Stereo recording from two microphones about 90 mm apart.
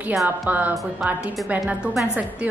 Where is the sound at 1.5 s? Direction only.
15° right (ahead or behind).